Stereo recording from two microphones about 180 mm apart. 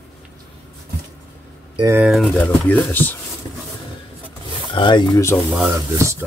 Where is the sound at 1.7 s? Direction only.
20° right (ahead or behind).